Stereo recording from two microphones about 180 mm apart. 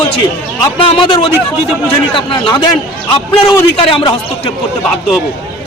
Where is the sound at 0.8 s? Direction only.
30° left (ahead or behind).